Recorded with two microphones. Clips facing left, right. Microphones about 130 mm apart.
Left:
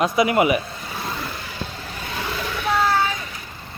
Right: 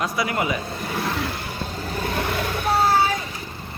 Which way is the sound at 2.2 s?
50° right (ahead or behind).